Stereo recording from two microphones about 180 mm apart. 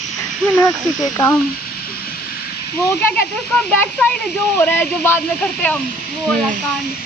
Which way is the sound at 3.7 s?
5° left (ahead or behind).